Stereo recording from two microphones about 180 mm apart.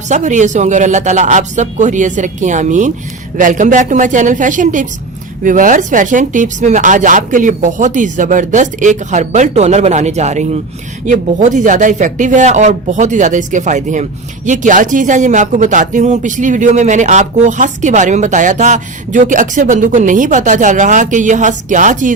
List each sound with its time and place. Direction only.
0.1 s speech: 45° right (ahead or behind)